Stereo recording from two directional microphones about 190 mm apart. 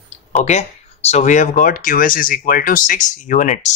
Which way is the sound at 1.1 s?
40° left (ahead or behind).